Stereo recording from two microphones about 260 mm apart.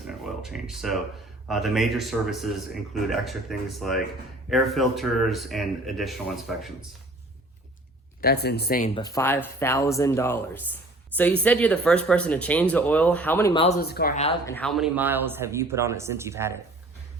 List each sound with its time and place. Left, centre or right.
0.4 s speech: centre
8.2 s speech: left
9.0 s speech: centre
13.5 s speech: left
13.7 s speech: left
14.4 s speech: centre